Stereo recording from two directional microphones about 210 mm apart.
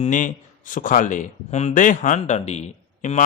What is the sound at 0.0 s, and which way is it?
Speech, 35° left (ahead or behind).